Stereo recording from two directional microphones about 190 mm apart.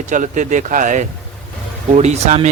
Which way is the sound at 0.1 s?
40° right (ahead or behind).